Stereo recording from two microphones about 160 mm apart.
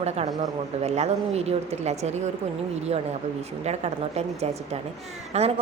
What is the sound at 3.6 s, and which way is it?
A woman's voice, 40° right (ahead or behind).